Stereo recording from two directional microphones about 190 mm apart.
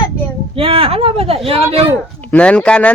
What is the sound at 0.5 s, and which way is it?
Speech, 30° right (ahead or behind).